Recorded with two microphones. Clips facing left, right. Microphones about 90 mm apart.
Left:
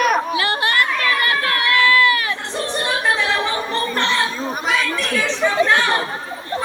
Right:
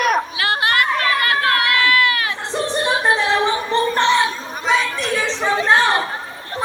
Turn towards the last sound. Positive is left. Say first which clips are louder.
# right 1 dB
turn(degrees=-30)  # may be behind; listen again after turning